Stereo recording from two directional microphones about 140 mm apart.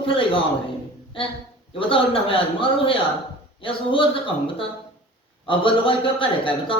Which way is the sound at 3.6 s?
40° left (ahead or behind).